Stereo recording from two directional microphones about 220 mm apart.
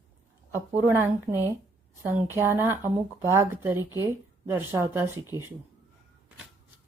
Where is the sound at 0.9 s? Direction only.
10° right (ahead or behind).